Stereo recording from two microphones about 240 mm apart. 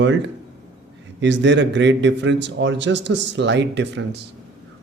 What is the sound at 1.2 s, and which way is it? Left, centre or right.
A man's voice, right.